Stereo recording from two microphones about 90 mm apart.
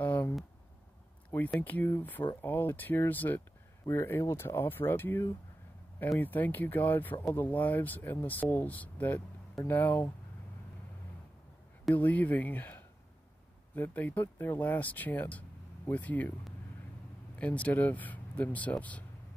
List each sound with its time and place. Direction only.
0.0 s a sound: 20° left (ahead or behind)
1.6 s speech: 20° left (ahead or behind)
11.9 s speech: 20° left (ahead or behind)
17.4 s speech: 15° left (ahead or behind)